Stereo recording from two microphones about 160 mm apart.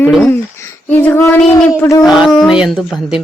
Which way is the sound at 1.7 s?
20° left (ahead or behind).